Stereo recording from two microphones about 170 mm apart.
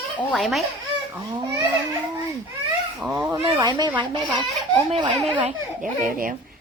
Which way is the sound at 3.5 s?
20° right (ahead or behind).